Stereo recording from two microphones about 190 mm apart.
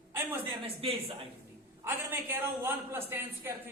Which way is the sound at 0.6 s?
30° right (ahead or behind).